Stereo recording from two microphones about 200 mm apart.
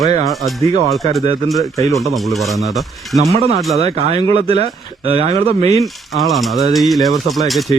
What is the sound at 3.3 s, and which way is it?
Speech, 30° right (ahead or behind).